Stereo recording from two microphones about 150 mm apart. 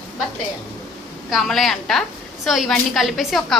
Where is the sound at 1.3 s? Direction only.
Centre (ahead or behind).